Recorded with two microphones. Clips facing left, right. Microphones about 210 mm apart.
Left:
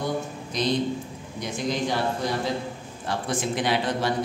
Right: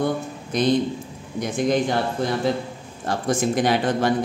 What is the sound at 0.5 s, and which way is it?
A man's voice, 55° right (ahead or behind).